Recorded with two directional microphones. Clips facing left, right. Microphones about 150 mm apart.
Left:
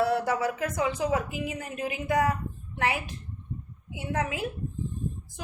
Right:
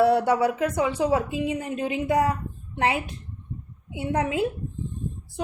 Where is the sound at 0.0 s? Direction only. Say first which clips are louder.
Right 6 dB; 25° right (ahead or behind).